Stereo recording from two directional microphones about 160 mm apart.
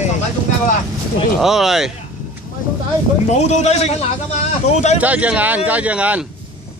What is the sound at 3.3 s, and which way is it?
A man's voice, 45° left (ahead or behind).